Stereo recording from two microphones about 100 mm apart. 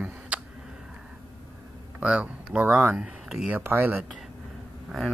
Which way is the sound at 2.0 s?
15° right (ahead or behind).